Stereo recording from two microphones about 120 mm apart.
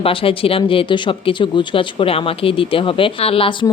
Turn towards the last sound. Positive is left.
turn(degrees=50)  # may be behind; listen again after turning